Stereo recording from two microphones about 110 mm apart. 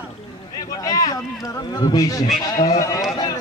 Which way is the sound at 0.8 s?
35° left (ahead or behind).